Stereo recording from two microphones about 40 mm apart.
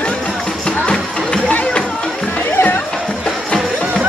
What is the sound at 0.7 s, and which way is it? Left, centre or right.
Music, left.